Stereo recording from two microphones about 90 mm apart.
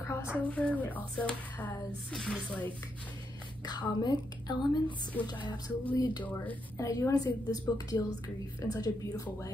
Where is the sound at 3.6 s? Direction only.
50° left (ahead or behind).